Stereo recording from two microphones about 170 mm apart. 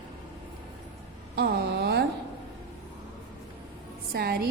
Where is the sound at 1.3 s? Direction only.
70° right (ahead or behind).